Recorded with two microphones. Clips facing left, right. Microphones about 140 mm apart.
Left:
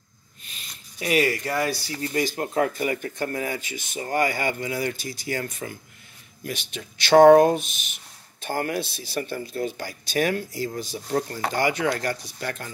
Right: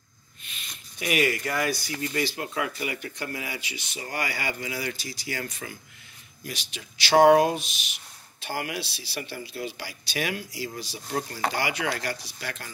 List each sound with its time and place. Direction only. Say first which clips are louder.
0.5 s speech: even; 35° left (ahead or behind)